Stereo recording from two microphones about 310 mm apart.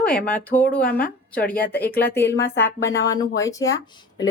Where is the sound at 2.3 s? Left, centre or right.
Centre.